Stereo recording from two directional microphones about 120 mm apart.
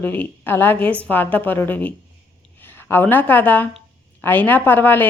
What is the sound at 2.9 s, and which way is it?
Speech, 15° left (ahead or behind).